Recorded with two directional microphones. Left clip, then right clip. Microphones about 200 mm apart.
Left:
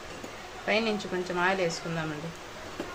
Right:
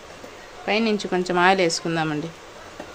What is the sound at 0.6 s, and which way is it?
Speech, 40° right (ahead or behind).